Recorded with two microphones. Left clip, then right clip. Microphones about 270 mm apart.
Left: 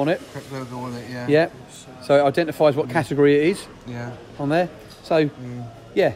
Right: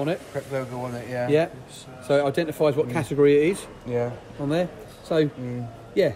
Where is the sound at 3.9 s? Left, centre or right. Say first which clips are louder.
Right 10 dB; centre.